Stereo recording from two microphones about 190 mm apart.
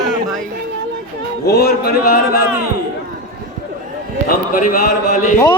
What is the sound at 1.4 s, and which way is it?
Speech, 55° left (ahead or behind).